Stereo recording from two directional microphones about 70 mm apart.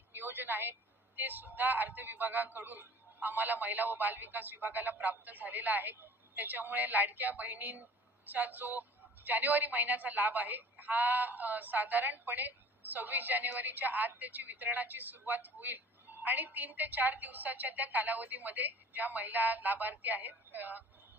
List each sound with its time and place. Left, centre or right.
0.1 s a woman's voice: right